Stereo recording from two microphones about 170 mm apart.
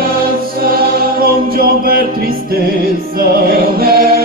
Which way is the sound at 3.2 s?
60° right (ahead or behind).